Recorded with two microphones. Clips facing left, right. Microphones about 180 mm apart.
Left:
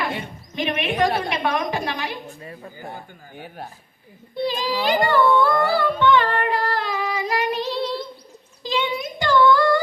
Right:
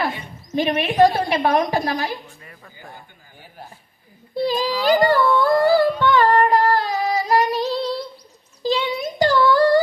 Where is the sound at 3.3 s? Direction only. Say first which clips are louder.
Left 6 dB; 65° left (ahead or behind).